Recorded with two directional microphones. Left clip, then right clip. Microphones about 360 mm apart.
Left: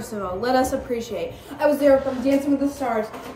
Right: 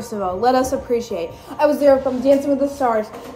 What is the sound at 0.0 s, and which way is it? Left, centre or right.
A woman's voice, centre.